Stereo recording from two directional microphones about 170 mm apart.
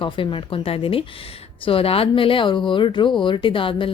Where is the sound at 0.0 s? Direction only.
30° left (ahead or behind).